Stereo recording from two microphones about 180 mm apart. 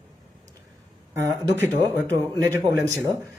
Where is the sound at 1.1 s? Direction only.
15° right (ahead or behind).